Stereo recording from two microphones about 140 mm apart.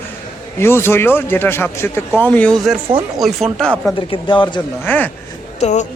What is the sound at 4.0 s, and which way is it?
Speech, 35° left (ahead or behind).